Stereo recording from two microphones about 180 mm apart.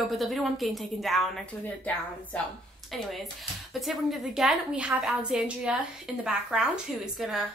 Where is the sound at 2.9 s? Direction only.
Centre (ahead or behind).